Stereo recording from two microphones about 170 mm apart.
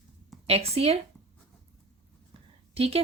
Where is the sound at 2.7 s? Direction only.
35° right (ahead or behind).